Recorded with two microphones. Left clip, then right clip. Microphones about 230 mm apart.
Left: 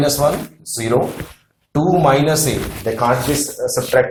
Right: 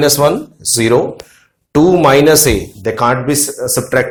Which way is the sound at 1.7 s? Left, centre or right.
Right.